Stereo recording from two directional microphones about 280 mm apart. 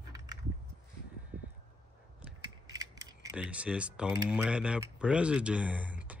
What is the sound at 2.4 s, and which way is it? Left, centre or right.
Mechanisms, centre.